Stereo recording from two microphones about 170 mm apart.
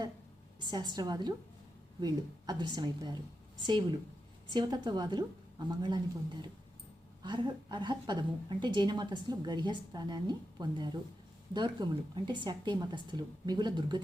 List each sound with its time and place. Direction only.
0.6 s a woman's voice: 25° right (ahead or behind)
7.2 s a woman's voice: 25° right (ahead or behind)